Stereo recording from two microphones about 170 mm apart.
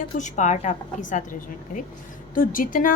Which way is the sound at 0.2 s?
45° left (ahead or behind).